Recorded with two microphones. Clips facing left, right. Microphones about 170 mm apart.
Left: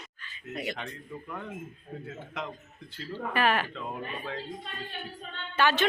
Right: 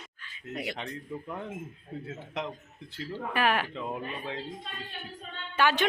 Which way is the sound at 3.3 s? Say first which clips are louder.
Left 1 dB; 10° right (ahead or behind).